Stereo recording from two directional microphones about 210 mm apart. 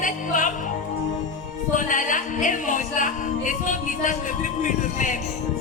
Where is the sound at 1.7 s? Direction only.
40° left (ahead or behind).